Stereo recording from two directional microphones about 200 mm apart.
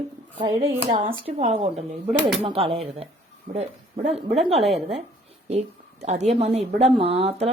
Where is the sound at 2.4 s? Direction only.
30° right (ahead or behind).